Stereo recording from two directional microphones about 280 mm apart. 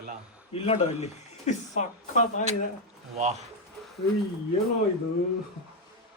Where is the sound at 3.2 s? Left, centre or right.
Right.